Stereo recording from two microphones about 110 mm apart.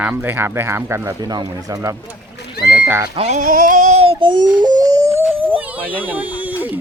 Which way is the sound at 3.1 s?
75° right (ahead or behind).